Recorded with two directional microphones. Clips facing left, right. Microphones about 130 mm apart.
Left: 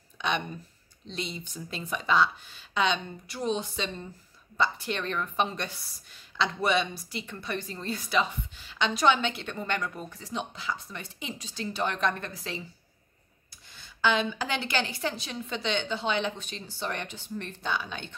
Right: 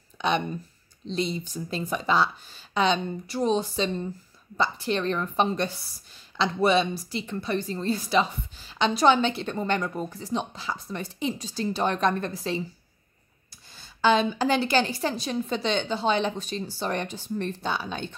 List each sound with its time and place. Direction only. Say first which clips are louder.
0.2 s a sound: right 5 dB; 30° right (ahead or behind)
1.0 s a woman's voice: right 8 dB; 35° right (ahead or behind)
13.7 s a woman's voice: right 5 dB; 35° right (ahead or behind)